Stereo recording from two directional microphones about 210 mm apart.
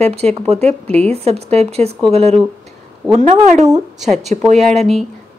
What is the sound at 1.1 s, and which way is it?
A woman's voice, 30° right (ahead or behind).